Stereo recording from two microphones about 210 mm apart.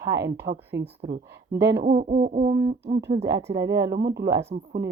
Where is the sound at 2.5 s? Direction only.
20° right (ahead or behind).